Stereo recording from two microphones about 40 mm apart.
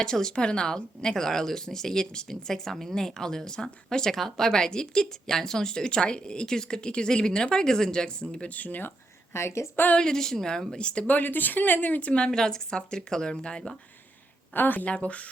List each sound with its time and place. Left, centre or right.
0.0 s speech: centre
8.4 s speech: left
9.3 s a woman's voice: left
10.0 s speech: centre
11.0 s speech: left
12.0 s speech: left
14.5 s speech: left
14.8 s speech: left